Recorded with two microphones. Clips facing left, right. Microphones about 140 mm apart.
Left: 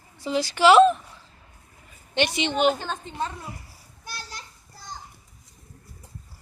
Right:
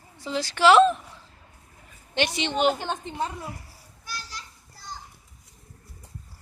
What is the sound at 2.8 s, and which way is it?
Speech, 15° right (ahead or behind).